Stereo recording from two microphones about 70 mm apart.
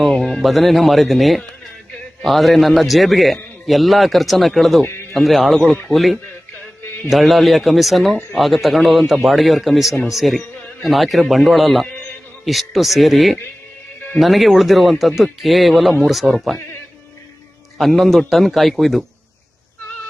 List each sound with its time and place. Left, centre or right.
0.0 s a man's voice: centre
4.8 s speech: left
5.1 s a man's voice: centre
17.7 s a man's voice: centre